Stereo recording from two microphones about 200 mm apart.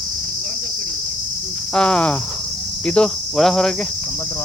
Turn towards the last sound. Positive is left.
turn(degrees=0)  # may be behind; listen again after turning